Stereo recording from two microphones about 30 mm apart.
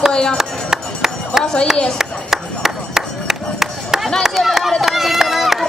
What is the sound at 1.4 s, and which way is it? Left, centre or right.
Speech, left.